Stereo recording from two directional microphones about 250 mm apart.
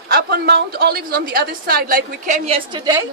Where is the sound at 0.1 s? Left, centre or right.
Right; by 3.1 s centre.